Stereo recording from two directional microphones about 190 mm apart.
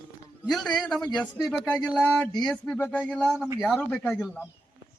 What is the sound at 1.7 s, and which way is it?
Speech, 5° left (ahead or behind).